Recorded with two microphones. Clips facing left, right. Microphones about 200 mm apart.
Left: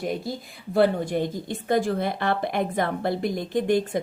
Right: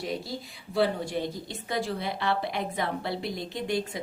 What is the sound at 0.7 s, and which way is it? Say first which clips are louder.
Speech: left 6 dB; 50° left (ahead or behind).